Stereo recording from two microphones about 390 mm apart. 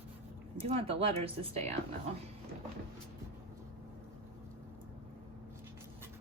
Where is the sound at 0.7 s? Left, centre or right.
Centre.